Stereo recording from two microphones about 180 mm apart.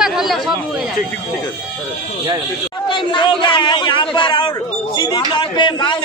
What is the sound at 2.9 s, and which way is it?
A man's voice, 25° left (ahead or behind).